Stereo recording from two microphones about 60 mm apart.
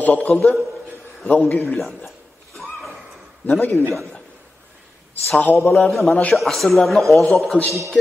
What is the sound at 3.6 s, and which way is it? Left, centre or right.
Speech, left.